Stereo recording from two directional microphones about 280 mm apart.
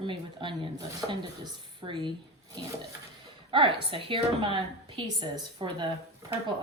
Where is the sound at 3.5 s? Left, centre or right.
Centre.